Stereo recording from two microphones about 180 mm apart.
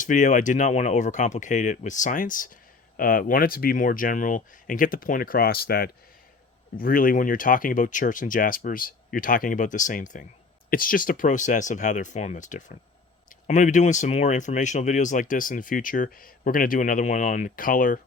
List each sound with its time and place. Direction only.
0.0 s speech: 45° left (ahead or behind)